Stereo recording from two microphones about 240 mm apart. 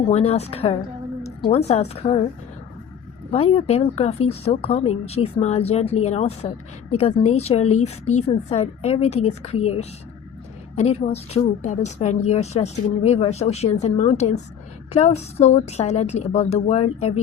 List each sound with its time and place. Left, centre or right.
0.1 s a woman's voice: left
3.3 s a woman's voice: left
10.8 s a woman's voice: left